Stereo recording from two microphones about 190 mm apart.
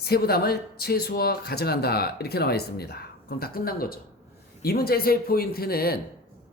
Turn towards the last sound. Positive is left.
turn(degrees=55)  # may be behind; listen again after turning